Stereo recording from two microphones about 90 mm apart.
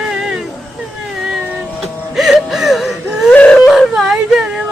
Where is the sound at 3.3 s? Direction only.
15° left (ahead or behind).